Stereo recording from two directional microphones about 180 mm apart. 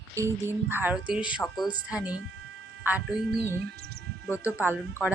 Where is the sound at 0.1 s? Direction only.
15° right (ahead or behind).